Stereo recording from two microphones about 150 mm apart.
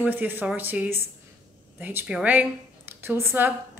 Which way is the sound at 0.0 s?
15° right (ahead or behind).